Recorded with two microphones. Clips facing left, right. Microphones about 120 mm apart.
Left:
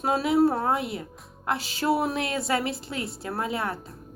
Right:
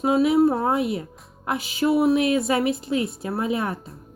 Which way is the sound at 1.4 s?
15° right (ahead or behind).